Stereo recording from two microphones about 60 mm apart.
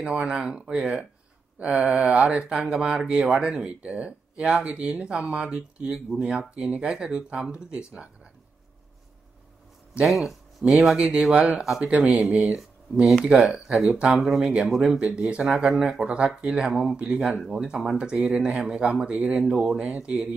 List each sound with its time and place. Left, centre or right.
0.0 s speech: centre
10.0 s speech: centre
10.6 s speech: centre
12.4 s speech: centre
14.1 s speech: centre
15.0 s speech: centre